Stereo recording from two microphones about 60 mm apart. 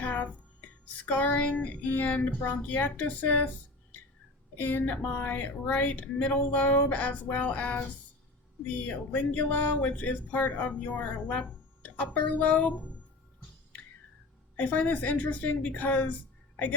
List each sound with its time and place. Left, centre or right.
0.0 s music: left
1.0 s speech: left
4.5 s speech: left
14.5 s speech: left